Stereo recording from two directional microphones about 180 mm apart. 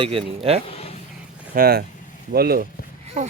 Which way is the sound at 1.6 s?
55° right (ahead or behind).